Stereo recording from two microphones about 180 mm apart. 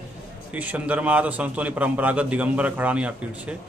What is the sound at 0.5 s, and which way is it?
A man's voice, 10° right (ahead or behind).